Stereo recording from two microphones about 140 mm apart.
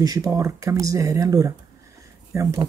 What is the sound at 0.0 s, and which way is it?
A man's voice, 25° right (ahead or behind).